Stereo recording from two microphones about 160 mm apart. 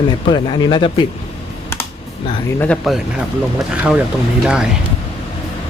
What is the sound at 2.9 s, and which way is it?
Speech, centre (ahead or behind).